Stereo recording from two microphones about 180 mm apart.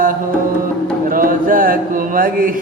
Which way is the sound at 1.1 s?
50° right (ahead or behind).